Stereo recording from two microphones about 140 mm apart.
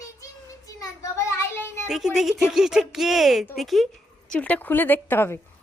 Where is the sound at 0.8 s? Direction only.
20° left (ahead or behind).